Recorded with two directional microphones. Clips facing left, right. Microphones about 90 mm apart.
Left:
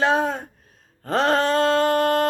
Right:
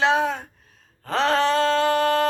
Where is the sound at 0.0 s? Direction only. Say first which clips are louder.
Even; 45° left (ahead or behind).